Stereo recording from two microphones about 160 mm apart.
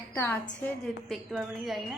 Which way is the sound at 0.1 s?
15° left (ahead or behind).